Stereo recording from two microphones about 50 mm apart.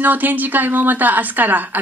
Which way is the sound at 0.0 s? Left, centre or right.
Right.